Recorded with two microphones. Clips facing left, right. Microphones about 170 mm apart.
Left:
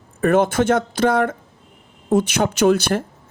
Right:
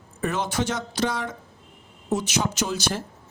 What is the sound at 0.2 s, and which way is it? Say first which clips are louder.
Speech: left 10 dB; 55° left (ahead or behind).